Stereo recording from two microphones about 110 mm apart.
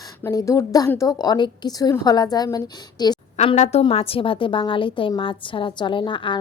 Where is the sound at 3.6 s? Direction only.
70° left (ahead or behind).